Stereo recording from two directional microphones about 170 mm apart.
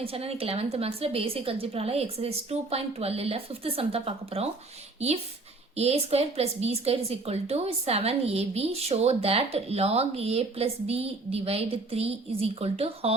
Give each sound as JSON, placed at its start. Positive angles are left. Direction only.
{"t": 0.0, "sound": "a woman's voice", "side_deg": -35}